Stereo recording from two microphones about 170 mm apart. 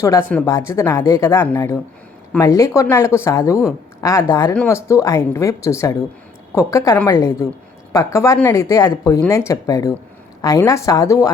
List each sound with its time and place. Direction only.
0.0 s speech: 15° left (ahead or behind)